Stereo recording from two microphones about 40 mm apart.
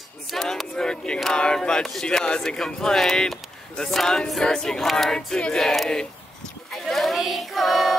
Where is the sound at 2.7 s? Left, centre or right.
Centre.